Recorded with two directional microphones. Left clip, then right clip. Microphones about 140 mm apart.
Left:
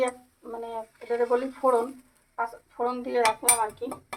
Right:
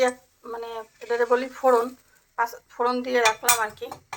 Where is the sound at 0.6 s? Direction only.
10° left (ahead or behind).